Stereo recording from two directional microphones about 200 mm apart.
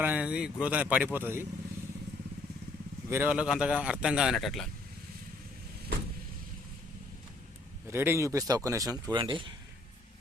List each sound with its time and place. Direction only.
0.0 s speech: 5° right (ahead or behind)
3.1 s speech: 10° right (ahead or behind)
7.9 s speech: 10° right (ahead or behind)